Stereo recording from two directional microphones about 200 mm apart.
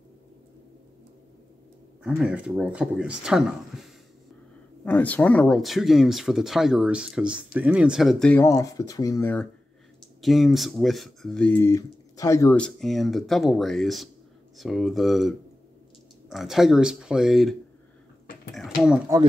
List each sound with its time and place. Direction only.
2.0 s speech: 5° right (ahead or behind)
8.5 s speech: 15° left (ahead or behind)
10.2 s speech: centre (ahead or behind)
18.5 s a sound: centre (ahead or behind)